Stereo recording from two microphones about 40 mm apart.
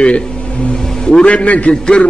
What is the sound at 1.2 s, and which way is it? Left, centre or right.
Speech, left.